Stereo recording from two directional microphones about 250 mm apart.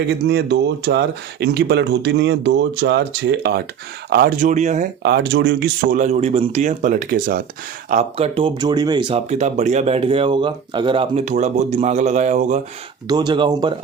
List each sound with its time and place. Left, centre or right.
0.1 s speech: right
5.0 s a man's voice: right
13.1 s speech: centre